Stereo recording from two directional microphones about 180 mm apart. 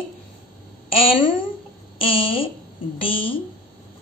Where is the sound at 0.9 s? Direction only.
30° left (ahead or behind).